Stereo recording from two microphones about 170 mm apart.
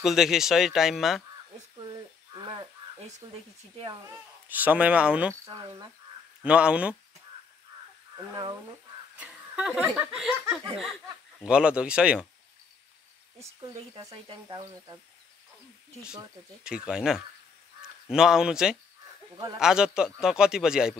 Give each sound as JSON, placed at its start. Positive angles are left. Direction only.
{"t": 0.0, "sound": "a man's voice", "side_deg": 0}
{"t": 2.3, "sound": "frog", "side_deg": -25}
{"t": 3.2, "sound": "speech", "side_deg": -25}
{"t": 4.0, "sound": "speech", "side_deg": -10}
{"t": 6.4, "sound": "speech", "side_deg": -5}
{"t": 8.2, "sound": "speech", "side_deg": -25}
{"t": 9.1, "sound": "speech", "side_deg": -5}
{"t": 11.4, "sound": "a man's voice", "side_deg": -5}
{"t": 14.2, "sound": "speech", "side_deg": -30}
{"t": 16.6, "sound": "a man's voice", "side_deg": -5}